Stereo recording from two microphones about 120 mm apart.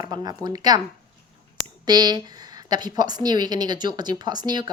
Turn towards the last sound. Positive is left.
turn(degrees=-35)  # may be behind; listen again after turning